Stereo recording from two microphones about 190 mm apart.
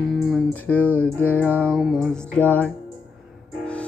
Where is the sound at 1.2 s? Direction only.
10° left (ahead or behind).